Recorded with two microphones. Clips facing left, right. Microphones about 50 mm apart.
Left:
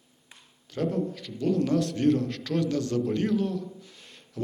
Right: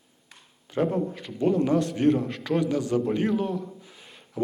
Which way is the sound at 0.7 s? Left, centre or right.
Right.